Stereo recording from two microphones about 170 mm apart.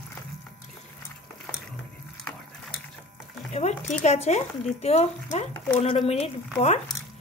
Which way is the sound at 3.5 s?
40° left (ahead or behind).